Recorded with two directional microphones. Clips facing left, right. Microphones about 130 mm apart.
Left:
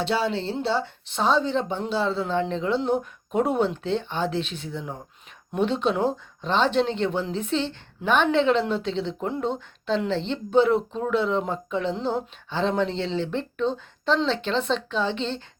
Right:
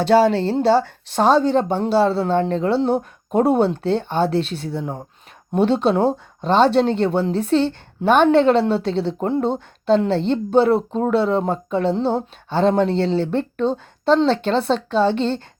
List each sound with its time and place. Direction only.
0.0 s speech: 45° right (ahead or behind)
12.5 s speech: 45° right (ahead or behind)